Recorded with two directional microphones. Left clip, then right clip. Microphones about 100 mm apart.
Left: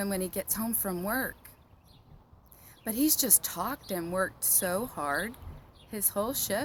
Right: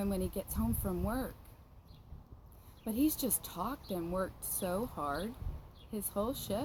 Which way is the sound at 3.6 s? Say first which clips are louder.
Left 3 dB; 55° left (ahead or behind).